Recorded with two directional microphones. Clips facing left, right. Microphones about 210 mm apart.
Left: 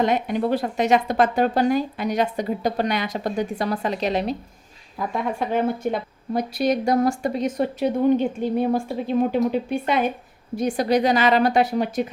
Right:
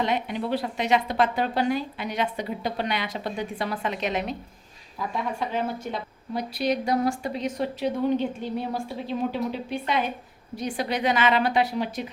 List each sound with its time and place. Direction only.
0.0 s a woman's voice: 45° left (ahead or behind)
4.9 s a woman's voice: 50° left (ahead or behind)